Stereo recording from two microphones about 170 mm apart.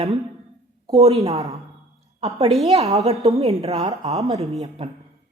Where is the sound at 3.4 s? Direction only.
35° right (ahead or behind).